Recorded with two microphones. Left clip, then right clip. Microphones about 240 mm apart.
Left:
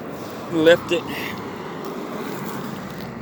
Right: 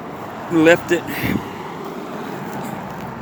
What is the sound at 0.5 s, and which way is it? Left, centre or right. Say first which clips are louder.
Speech: right 2 dB; right.